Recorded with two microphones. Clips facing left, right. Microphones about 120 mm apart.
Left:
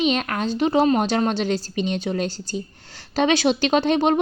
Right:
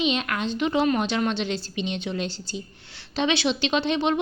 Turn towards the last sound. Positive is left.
turn(degrees=45)  # may be behind; listen again after turning